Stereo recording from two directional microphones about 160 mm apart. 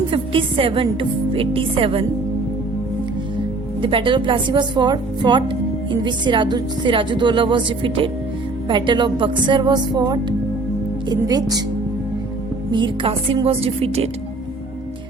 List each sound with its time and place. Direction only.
0.1 s speech: 35° right (ahead or behind)
3.8 s speech: 35° right (ahead or behind)
12.7 s speech: 30° right (ahead or behind)